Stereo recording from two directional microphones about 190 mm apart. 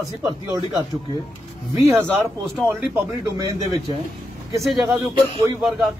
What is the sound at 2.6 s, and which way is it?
Speech, 15° right (ahead or behind).